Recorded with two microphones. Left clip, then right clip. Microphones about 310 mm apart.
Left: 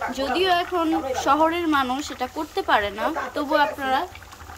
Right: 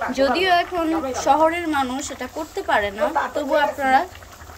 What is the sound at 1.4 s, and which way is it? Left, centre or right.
Speech, centre.